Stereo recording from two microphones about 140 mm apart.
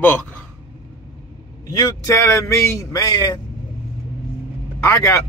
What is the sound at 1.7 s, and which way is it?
A man's voice, 20° left (ahead or behind).